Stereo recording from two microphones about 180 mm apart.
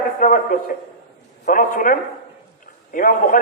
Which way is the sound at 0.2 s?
50° left (ahead or behind).